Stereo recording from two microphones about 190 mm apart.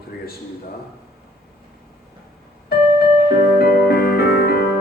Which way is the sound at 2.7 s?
55° left (ahead or behind).